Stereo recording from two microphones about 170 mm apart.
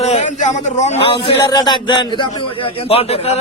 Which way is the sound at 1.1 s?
25° left (ahead or behind).